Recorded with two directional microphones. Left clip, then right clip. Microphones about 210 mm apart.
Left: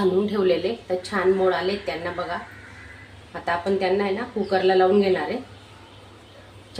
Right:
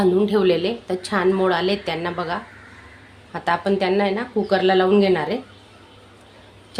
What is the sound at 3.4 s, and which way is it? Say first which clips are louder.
A woman's voice: right 3 dB; 50° right (ahead or behind).